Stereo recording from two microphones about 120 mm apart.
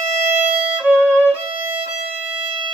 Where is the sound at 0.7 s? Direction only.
10° right (ahead or behind).